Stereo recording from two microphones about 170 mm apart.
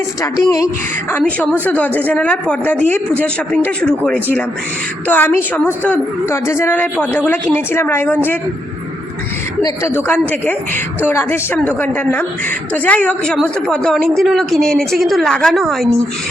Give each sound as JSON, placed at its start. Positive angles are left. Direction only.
{"t": 0.2, "sound": "a woman's voice", "side_deg": 20}
{"t": 1.2, "sound": "speech", "side_deg": 5}
{"t": 9.6, "sound": "a woman's voice", "side_deg": 15}